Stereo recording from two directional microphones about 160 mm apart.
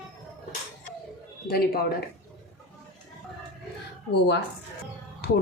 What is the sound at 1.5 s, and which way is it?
Speech, 70° left (ahead or behind).